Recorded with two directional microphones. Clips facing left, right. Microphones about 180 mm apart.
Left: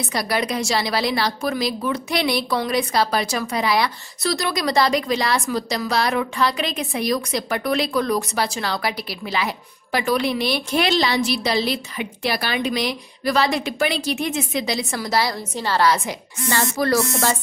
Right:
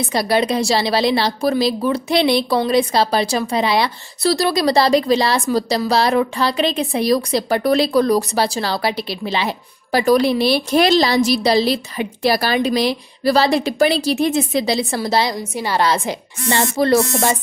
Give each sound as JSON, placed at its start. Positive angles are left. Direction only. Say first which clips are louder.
{"t": 0.1, "sound": "a woman's voice", "louder": "right 6 dB", "side_deg": -30}
{"t": 15.9, "sound": "a woman's voice", "louder": "right 2 dB", "side_deg": -30}